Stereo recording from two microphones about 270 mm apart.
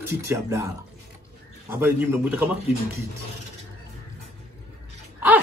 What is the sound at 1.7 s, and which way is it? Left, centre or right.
Speech, centre.